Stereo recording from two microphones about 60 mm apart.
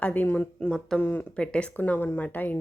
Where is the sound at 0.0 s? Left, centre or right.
Left.